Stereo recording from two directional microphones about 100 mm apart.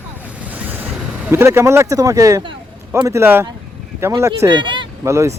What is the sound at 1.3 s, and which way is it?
Speech, 25° right (ahead or behind).